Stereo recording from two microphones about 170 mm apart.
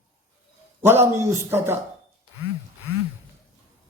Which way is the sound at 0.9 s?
15° right (ahead or behind).